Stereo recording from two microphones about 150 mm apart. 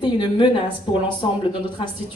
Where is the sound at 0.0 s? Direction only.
35° left (ahead or behind).